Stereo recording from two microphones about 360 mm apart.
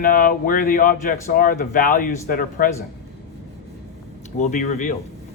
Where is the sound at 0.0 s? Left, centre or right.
Left.